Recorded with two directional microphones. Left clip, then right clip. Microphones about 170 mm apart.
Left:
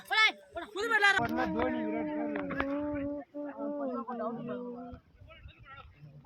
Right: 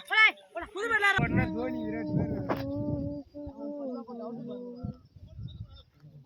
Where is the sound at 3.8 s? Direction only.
25° right (ahead or behind).